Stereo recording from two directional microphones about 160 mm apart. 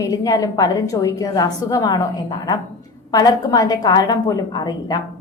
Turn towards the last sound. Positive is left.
turn(degrees=25)  # may be behind; listen again after turning